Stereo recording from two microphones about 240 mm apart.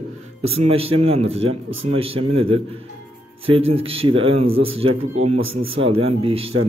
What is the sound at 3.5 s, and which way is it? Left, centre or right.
Speech, right.